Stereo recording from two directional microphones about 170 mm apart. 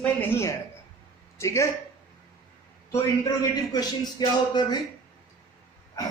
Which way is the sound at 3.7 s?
25° left (ahead or behind).